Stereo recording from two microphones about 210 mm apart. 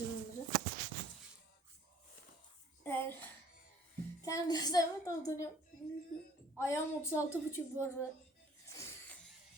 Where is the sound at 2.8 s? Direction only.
10° left (ahead or behind).